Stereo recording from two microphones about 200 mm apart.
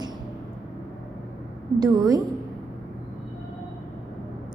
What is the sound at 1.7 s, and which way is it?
Speech, 20° right (ahead or behind).